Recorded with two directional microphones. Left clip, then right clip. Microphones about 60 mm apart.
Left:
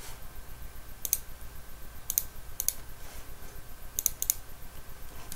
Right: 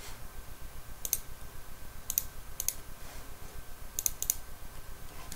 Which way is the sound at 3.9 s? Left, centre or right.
Left.